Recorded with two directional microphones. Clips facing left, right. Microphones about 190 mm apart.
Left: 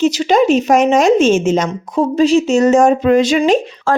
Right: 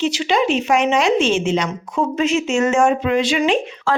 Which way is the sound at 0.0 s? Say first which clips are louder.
Left 6 dB; 40° left (ahead or behind).